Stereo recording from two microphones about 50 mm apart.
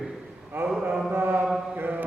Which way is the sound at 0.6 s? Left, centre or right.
Right.